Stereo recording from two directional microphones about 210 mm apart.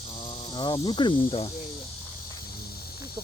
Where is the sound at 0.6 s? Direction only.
20° left (ahead or behind).